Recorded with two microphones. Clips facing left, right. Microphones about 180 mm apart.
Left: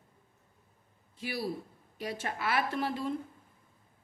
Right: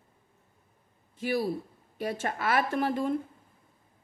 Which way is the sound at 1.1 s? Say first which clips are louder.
Right 6 dB; 50° right (ahead or behind).